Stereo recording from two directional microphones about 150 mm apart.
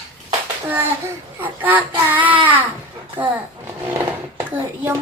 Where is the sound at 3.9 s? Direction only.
15° right (ahead or behind).